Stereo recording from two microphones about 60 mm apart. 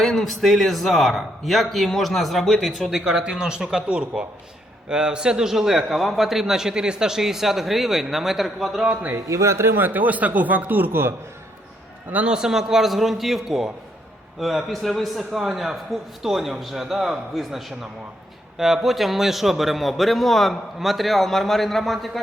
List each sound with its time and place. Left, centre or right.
0.0 s a man's voice: centre
9.3 s speech: right
9.7 s speech: right
12.1 s a man's voice: centre